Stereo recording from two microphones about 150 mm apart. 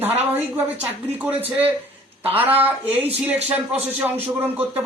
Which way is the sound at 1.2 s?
10° right (ahead or behind).